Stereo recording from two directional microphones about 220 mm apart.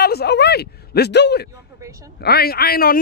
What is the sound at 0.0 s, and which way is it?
Speech, 45° left (ahead or behind).